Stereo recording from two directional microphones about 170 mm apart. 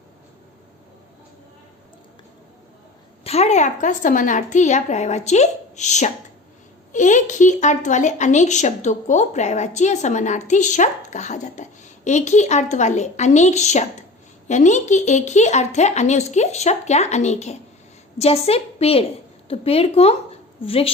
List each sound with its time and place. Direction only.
3.2 s a woman's voice: 40° left (ahead or behind)